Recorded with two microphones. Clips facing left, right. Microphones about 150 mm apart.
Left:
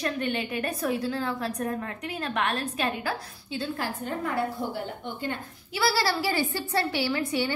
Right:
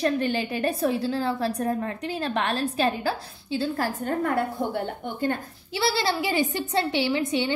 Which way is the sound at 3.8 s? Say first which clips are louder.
Right 5 dB; 50° right (ahead or behind).